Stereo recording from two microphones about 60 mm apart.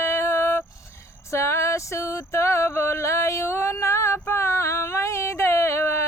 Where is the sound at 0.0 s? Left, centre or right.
Left.